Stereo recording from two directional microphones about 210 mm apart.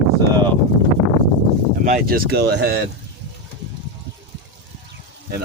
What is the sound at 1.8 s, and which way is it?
Speech, 40° right (ahead or behind).